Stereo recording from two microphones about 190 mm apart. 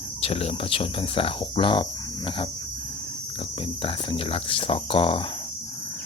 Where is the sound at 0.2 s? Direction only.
30° left (ahead or behind).